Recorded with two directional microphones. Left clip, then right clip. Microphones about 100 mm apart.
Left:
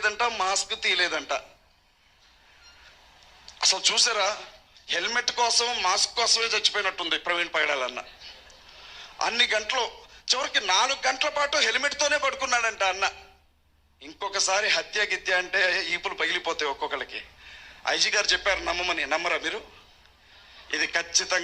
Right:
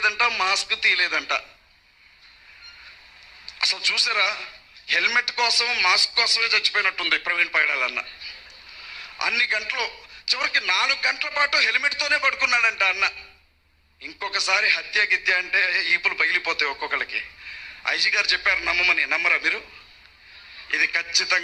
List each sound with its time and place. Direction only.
0.0 s a man's voice: 50° left (ahead or behind)
3.4 s a man's voice: 50° left (ahead or behind)